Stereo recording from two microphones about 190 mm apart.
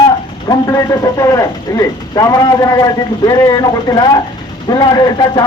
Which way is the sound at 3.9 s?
20° left (ahead or behind).